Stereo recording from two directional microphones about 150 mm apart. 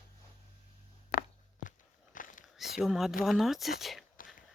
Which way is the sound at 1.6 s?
60° left (ahead or behind).